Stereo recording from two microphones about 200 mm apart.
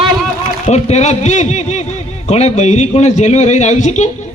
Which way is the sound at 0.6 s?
35° left (ahead or behind).